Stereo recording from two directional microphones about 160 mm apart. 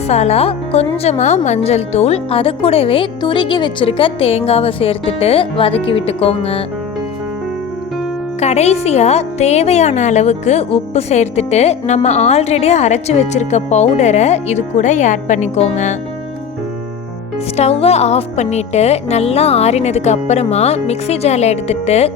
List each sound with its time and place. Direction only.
0.1 s speech: 40° left (ahead or behind)
8.4 s a woman's voice: 45° left (ahead or behind)
17.6 s speech: 40° left (ahead or behind)